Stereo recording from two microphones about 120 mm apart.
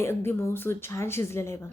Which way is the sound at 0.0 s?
20° left (ahead or behind).